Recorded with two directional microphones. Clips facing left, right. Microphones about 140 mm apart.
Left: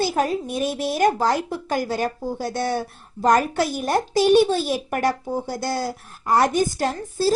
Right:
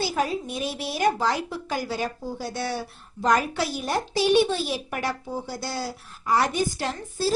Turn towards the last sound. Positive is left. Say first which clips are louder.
# left 5 dB
turn(degrees=40)  # may be behind; listen again after turning